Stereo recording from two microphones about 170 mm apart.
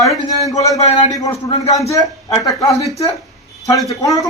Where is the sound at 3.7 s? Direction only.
20° left (ahead or behind).